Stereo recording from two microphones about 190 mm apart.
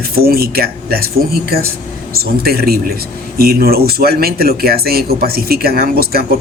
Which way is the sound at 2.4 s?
55° right (ahead or behind).